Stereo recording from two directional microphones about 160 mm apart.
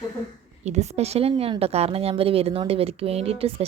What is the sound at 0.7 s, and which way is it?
A woman's voice, 40° right (ahead or behind).